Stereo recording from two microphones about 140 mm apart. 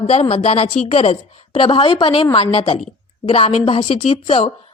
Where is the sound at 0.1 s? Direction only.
45° left (ahead or behind).